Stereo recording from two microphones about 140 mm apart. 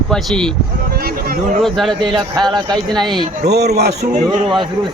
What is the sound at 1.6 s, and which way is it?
Speech, centre (ahead or behind).